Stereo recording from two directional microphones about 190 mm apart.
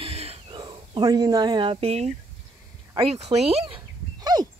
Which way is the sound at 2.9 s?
30° right (ahead or behind).